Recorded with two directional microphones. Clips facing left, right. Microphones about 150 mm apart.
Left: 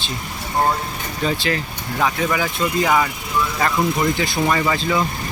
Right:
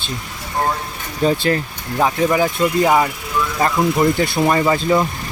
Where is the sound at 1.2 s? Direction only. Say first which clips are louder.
Right 5 dB; 45° right (ahead or behind).